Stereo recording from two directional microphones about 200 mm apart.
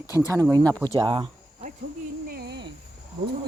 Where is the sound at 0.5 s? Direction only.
20° right (ahead or behind).